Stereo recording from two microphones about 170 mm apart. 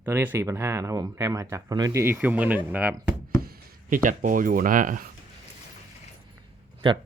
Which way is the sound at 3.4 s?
50° right (ahead or behind).